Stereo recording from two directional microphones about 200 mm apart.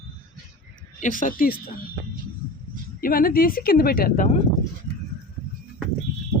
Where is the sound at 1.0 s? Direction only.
40° left (ahead or behind).